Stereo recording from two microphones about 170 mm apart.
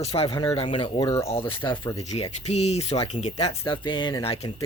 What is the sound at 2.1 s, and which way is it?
Speech, 40° left (ahead or behind).